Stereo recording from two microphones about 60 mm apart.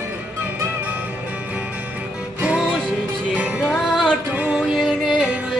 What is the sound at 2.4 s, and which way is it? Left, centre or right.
Music, centre.